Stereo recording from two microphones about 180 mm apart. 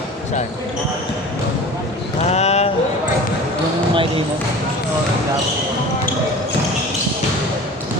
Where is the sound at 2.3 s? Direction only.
35° left (ahead or behind).